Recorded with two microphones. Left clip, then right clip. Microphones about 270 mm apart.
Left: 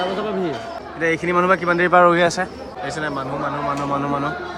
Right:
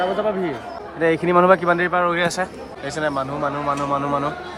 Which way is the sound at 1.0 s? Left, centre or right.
Centre.